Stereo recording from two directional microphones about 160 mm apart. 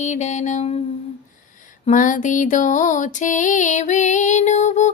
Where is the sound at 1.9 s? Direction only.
50° left (ahead or behind).